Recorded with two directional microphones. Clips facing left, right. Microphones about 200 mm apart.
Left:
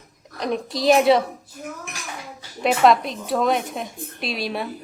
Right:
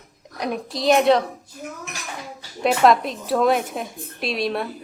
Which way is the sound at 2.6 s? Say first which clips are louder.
Even; centre (ahead or behind).